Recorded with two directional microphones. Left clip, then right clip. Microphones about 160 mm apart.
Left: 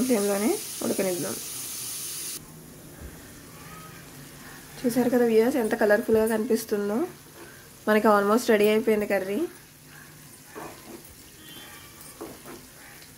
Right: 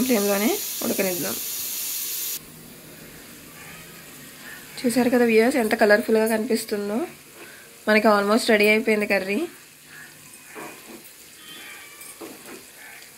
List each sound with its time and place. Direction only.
0.1 s speech: 5° left (ahead or behind)
4.8 s speech: 5° left (ahead or behind)
9.0 s speech: 5° left (ahead or behind)